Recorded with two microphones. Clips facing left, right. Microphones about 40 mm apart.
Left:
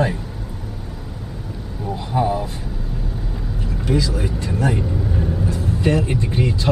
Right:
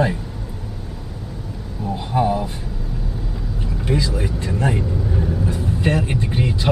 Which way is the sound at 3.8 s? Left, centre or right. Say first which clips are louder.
Left 1 dB; right.